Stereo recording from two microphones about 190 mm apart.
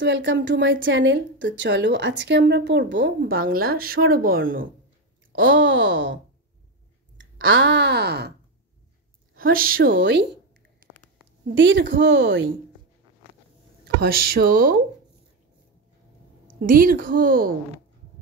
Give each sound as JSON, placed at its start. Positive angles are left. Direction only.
{"t": 0.0, "sound": "a woman's voice", "side_deg": -70}
{"t": 0.8, "sound": "a woman's voice", "side_deg": -80}
{"t": 3.3, "sound": "a woman's voice", "side_deg": -50}
{"t": 5.3, "sound": "a woman's voice", "side_deg": -75}
{"t": 7.2, "sound": "speech", "side_deg": -90}
{"t": 9.4, "sound": "a woman's voice", "side_deg": -50}
{"t": 9.9, "sound": "a woman's voice", "side_deg": -70}
{"t": 11.4, "sound": "a woman's voice", "side_deg": -75}
{"t": 14.0, "sound": "a woman's voice", "side_deg": -50}
{"t": 16.6, "sound": "a woman's voice", "side_deg": -50}